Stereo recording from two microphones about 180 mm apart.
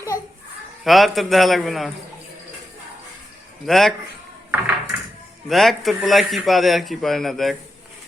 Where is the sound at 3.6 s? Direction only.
Centre (ahead or behind).